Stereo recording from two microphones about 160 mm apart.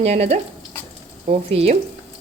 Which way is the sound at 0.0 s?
40° right (ahead or behind).